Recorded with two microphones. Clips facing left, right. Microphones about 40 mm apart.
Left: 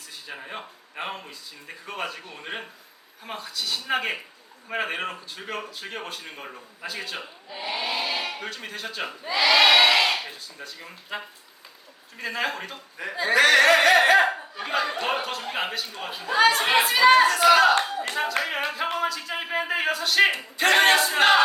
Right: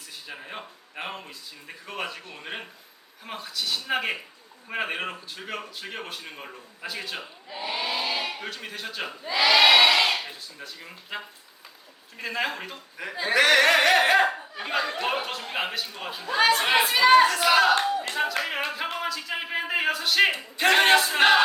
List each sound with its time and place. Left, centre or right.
0.3 s speech: centre